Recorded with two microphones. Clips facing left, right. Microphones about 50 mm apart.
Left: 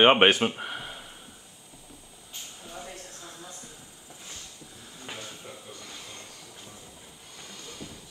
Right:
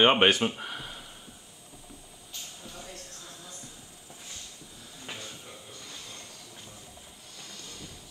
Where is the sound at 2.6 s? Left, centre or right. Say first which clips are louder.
Left 3 dB; centre.